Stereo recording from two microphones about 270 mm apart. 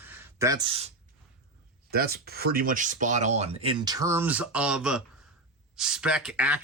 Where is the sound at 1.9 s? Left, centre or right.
Right.